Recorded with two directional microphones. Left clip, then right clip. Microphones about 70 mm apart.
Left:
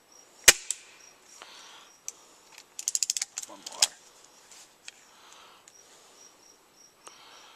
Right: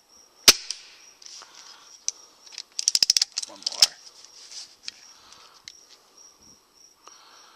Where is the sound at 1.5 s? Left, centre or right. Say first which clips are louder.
Right 1 dB; left.